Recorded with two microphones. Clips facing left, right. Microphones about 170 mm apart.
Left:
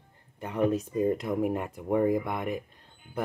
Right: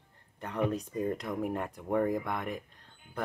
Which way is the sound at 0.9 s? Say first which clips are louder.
Left 6 dB; 20° left (ahead or behind).